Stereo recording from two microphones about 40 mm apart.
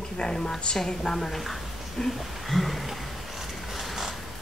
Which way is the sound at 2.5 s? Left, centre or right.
Centre.